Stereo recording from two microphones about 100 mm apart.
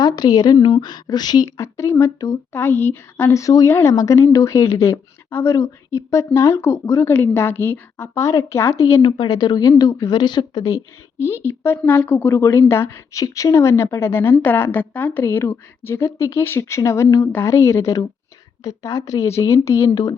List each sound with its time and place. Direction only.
0.0 s a woman's voice: 40° left (ahead or behind)
1.6 s a woman's voice: 30° left (ahead or behind)
3.4 s a woman's voice: 35° left (ahead or behind)
8.2 s a woman's voice: 30° left (ahead or behind)
9.0 s a woman's voice: 55° left (ahead or behind); by 19.9 s 30° left (ahead or behind)
19.9 s a woman's voice: 40° left (ahead or behind)